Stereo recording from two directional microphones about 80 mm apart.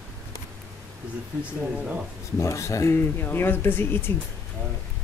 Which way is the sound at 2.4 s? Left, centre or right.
Left.